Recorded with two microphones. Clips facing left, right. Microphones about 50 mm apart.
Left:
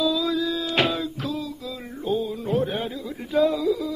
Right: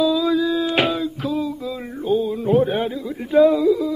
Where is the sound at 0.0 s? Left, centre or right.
Centre.